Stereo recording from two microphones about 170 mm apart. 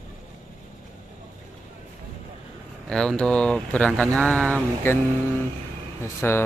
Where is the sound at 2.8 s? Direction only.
5° left (ahead or behind).